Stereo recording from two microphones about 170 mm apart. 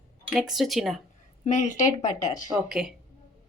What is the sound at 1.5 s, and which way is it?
Speech, 45° left (ahead or behind).